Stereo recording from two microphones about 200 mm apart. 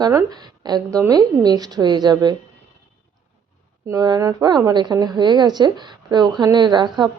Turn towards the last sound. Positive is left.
turn(degrees=-20)  # may be behind; listen again after turning